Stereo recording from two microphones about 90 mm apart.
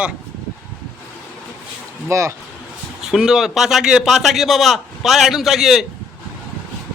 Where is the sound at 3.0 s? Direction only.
5° right (ahead or behind).